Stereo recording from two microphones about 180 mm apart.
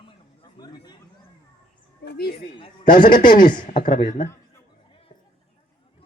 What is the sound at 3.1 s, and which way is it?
Speech, 50° left (ahead or behind).